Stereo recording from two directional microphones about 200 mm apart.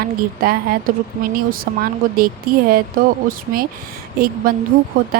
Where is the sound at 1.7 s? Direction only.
50° right (ahead or behind).